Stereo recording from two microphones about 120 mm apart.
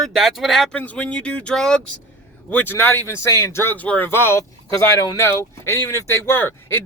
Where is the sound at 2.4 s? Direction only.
15° left (ahead or behind).